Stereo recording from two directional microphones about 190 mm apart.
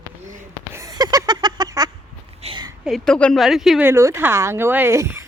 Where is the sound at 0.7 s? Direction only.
20° right (ahead or behind).